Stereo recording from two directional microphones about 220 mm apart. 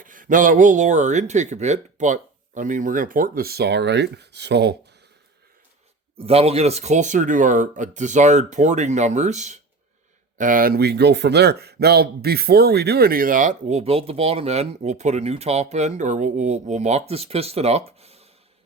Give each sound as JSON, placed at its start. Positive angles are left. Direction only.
{"t": 0.0, "sound": "speech", "side_deg": -35}
{"t": 6.1, "sound": "speech", "side_deg": -25}